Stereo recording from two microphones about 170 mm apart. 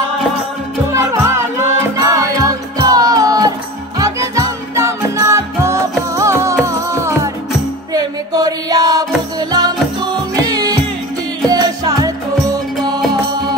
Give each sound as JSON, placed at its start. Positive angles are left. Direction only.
{"t": 0.9, "sound": "music", "side_deg": -15}
{"t": 7.9, "sound": "chant", "side_deg": -20}
{"t": 9.5, "sound": "music", "side_deg": -25}